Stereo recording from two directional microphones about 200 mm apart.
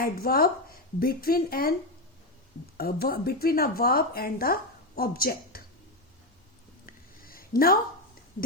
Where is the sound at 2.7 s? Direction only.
50° left (ahead or behind).